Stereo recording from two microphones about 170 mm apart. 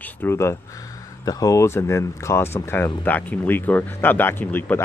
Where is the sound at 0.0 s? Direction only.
15° left (ahead or behind).